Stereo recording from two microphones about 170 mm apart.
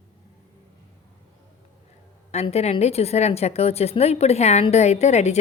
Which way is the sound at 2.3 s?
40° left (ahead or behind).